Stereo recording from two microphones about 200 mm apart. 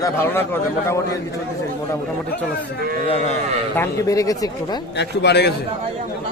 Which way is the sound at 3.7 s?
15° left (ahead or behind).